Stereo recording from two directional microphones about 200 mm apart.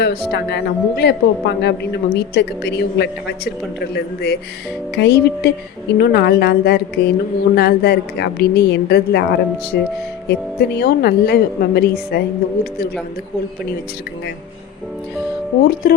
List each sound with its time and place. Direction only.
0.0 s a woman's voice: 55° left (ahead or behind)
15.8 s a woman's voice: 45° left (ahead or behind)